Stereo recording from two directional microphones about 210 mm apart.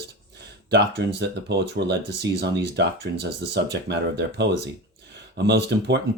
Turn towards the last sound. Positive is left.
turn(degrees=-55)  # may be behind; listen again after turning